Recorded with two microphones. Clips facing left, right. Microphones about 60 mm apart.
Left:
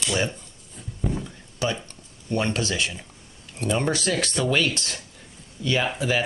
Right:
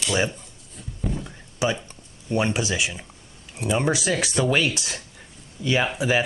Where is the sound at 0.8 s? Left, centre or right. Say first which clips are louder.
Left 1 dB; centre.